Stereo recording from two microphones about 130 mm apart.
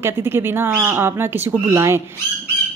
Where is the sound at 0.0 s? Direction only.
20° right (ahead or behind).